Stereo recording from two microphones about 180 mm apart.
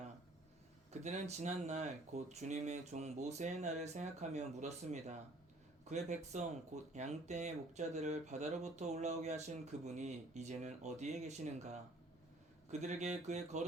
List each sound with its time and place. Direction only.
0.9 s speech: 40° right (ahead or behind)